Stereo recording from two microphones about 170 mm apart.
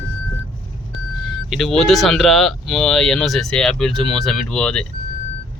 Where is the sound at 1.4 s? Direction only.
Centre (ahead or behind).